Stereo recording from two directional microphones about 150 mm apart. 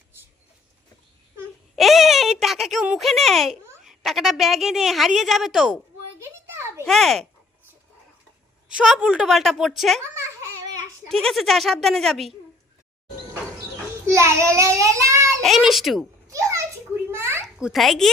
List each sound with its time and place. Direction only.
1.7 s speech: centre (ahead or behind)
6.1 s a sound: 15° right (ahead or behind)
6.8 s a woman's voice: centre (ahead or behind)
8.7 s a woman's voice: 5° right (ahead or behind)
11.1 s a woman's voice: centre (ahead or behind)
14.1 s child singing: 20° right (ahead or behind)
15.4 s a woman's voice: centre (ahead or behind)
16.2 s children playing: 20° right (ahead or behind)
17.1 s a sound: 15° right (ahead or behind)
17.4 s a child's voice: centre (ahead or behind)